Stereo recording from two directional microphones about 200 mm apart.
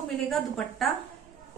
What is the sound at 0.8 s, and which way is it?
Speech, centre (ahead or behind).